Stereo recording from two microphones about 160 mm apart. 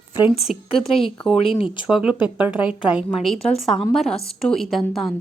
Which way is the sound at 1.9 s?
5° right (ahead or behind).